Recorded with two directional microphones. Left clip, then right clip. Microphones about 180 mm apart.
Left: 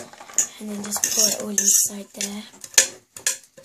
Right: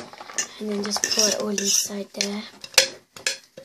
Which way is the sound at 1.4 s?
30° right (ahead or behind).